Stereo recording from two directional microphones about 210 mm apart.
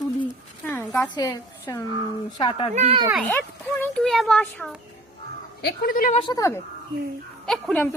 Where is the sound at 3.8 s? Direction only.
5° left (ahead or behind).